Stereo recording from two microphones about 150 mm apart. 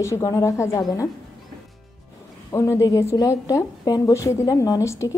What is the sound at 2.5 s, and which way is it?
A woman's voice, 20° left (ahead or behind).